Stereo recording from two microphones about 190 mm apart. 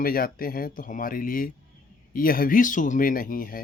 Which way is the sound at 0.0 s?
50° left (ahead or behind).